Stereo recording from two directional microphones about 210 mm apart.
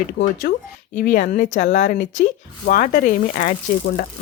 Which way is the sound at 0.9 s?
35° left (ahead or behind).